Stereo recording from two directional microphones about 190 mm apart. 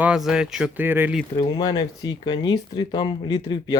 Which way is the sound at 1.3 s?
20° left (ahead or behind).